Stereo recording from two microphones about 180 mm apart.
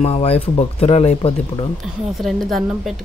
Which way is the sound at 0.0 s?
35° left (ahead or behind).